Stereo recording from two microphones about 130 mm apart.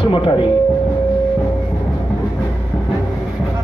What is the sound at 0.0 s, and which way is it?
Speech, 40° left (ahead or behind).